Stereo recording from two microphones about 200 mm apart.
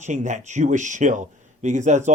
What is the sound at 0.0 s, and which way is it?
Speech, 35° right (ahead or behind).